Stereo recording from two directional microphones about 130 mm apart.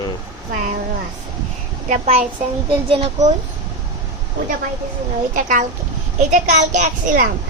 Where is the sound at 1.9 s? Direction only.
55° right (ahead or behind).